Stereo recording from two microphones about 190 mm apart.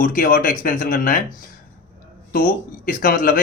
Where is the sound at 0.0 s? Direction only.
45° left (ahead or behind).